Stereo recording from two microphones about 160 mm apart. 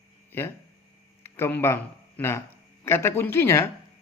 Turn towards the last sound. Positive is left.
turn(degrees=15)  # may be behind; listen again after turning